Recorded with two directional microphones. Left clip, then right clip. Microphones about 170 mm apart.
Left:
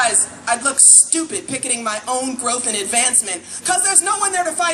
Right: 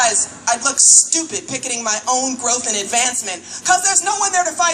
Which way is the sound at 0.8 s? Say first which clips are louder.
Right 2 dB; 45° left (ahead or behind).